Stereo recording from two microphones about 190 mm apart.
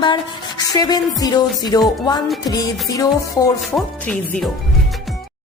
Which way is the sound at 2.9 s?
20° left (ahead or behind).